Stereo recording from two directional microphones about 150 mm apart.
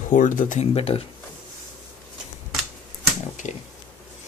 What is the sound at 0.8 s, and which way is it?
Speech, 40° left (ahead or behind).